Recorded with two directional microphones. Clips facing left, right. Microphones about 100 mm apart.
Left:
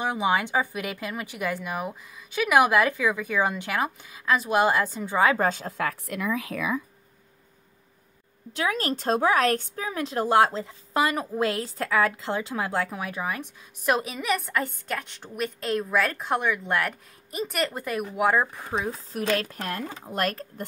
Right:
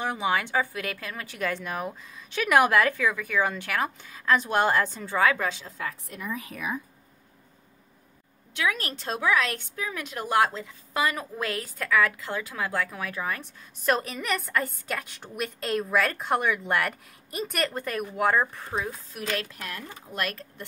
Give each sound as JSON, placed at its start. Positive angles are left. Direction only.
{"t": 0.0, "sound": "speech", "side_deg": 15}
{"t": 5.3, "sound": "a woman's voice", "side_deg": 40}
{"t": 8.5, "sound": "a woman's voice", "side_deg": 35}
{"t": 19.2, "sound": "a woman's voice", "side_deg": 50}